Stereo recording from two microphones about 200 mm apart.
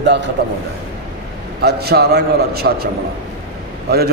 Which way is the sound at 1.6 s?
50° right (ahead or behind).